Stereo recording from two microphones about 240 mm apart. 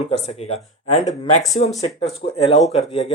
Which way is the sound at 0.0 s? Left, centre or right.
Left.